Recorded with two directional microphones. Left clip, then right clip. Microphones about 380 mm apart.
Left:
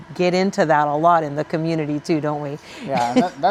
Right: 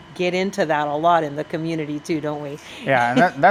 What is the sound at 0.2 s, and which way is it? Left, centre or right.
Speech, left.